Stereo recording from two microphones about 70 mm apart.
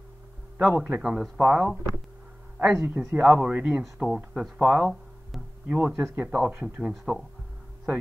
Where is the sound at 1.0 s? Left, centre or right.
Centre.